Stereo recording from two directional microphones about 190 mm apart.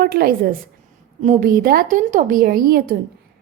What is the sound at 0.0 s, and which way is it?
Speech, 50° right (ahead or behind).